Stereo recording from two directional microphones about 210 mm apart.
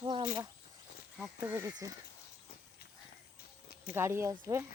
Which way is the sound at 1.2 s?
10° right (ahead or behind).